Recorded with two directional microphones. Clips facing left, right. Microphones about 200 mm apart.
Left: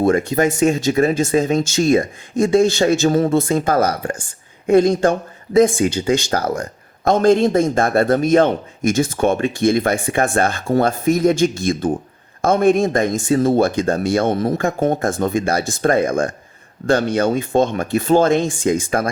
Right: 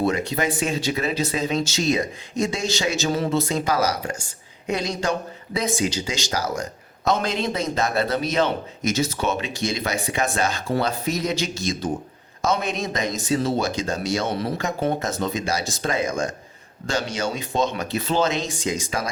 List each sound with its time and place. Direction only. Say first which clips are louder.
0.0 s speech: left 7 dB; 50° left (ahead or behind)